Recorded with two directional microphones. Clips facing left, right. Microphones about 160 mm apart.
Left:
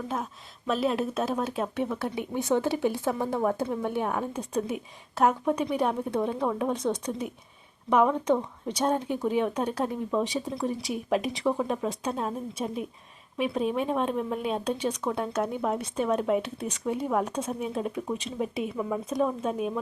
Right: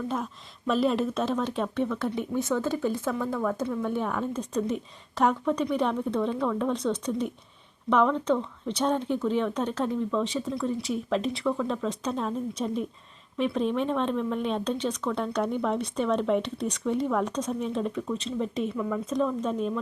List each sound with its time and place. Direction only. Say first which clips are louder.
0.7 s speech: right 2 dB; centre (ahead or behind); by 3.5 s 20° left (ahead or behind)
4.0 s speech: even; 10° left (ahead or behind)